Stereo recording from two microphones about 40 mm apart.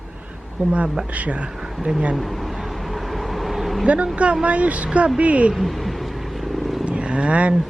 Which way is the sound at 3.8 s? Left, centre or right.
Right.